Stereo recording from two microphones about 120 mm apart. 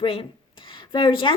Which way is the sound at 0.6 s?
45° left (ahead or behind).